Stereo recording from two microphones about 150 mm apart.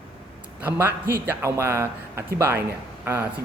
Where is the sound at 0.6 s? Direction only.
10° right (ahead or behind).